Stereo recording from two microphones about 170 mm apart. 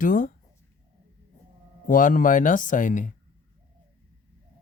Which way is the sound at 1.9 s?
50° left (ahead or behind).